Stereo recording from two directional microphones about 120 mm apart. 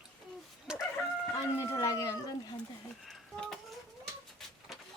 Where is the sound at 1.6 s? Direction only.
25° left (ahead or behind).